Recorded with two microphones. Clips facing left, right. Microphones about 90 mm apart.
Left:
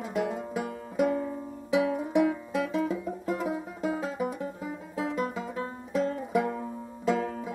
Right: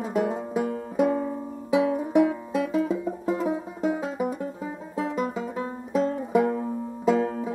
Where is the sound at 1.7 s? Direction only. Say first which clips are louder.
Right 4 dB; 30° right (ahead or behind).